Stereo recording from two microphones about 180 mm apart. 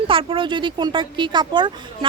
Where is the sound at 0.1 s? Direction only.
30° right (ahead or behind).